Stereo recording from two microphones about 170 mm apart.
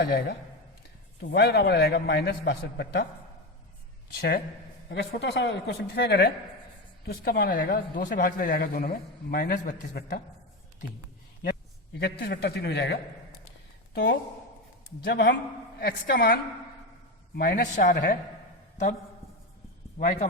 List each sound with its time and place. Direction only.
0.0 s a man's voice: 65° left (ahead or behind)
4.1 s a man's voice: 70° left (ahead or behind)
4.9 s a woman's voice: 85° left
7.1 s speech: 65° left (ahead or behind)
11.9 s a man's voice: 65° left (ahead or behind); by 13.0 s 85° left
15.0 s a man's voice: 75° left (ahead or behind); by 18.0 s 55° left (ahead or behind)
20.0 s speech: 50° left (ahead or behind)